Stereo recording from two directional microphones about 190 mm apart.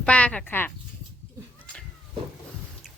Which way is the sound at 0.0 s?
5° left (ahead or behind).